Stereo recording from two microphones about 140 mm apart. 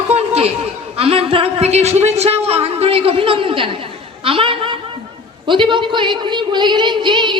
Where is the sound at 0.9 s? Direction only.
45° right (ahead or behind).